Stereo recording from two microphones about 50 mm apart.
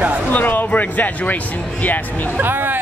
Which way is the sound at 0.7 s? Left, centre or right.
Left.